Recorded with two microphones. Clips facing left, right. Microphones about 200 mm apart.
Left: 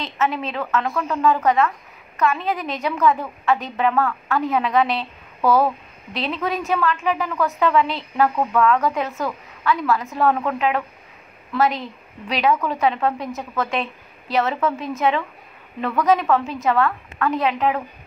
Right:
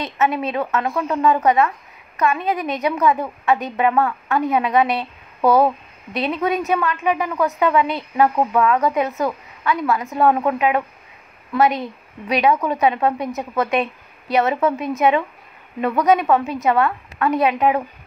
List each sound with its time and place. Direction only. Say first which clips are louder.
0.2 s a woman's voice: right 3 dB; 15° right (ahead or behind)
12.4 s a woman's voice: right 2 dB; 15° right (ahead or behind)